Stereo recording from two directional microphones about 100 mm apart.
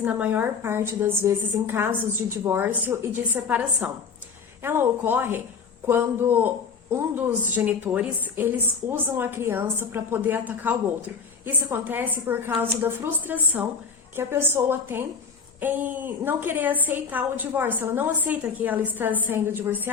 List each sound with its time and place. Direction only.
0.0 s a woman's voice: 15° right (ahead or behind)